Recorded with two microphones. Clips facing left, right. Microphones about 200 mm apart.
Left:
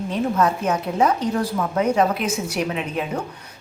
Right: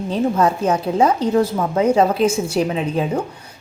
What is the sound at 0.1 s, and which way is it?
A woman's voice, 30° right (ahead or behind).